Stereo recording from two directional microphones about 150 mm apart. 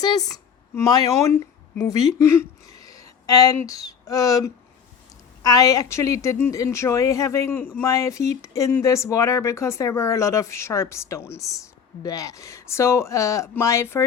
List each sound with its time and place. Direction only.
0.0 s speech: 25° left (ahead or behind)
2.1 s a sound: 20° left (ahead or behind)
3.7 s speech: 25° left (ahead or behind)